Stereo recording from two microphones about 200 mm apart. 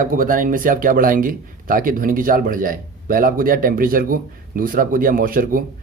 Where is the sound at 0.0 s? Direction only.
45° right (ahead or behind).